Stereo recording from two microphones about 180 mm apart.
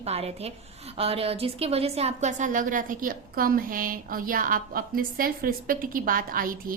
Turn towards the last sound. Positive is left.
turn(degrees=-50)  # may be behind; listen again after turning